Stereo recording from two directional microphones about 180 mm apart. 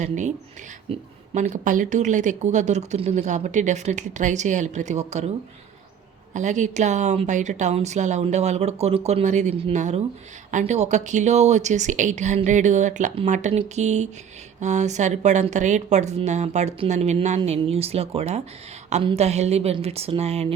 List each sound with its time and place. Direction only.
0.0 s speech: 40° right (ahead or behind)
6.3 s speech: 40° right (ahead or behind)